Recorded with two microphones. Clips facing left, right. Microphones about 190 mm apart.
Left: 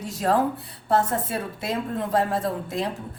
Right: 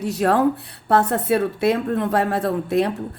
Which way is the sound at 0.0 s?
65° right (ahead or behind).